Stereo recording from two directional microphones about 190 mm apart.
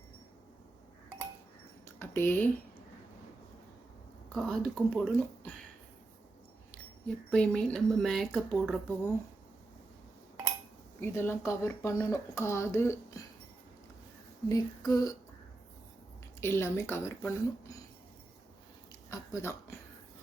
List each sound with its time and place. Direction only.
2.0 s speech: 10° left (ahead or behind)
4.3 s speech: 5° left (ahead or behind)
7.3 s speech: 5° left (ahead or behind)
11.0 s speech: 10° left (ahead or behind)
14.5 s a sound: 20° left (ahead or behind)
16.4 s speech: 10° left (ahead or behind)
19.1 s speech: 15° left (ahead or behind)